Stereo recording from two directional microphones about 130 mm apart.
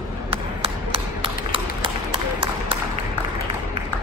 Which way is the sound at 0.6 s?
45° right (ahead or behind).